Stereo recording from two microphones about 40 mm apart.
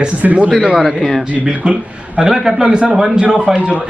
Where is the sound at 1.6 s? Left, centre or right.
Centre.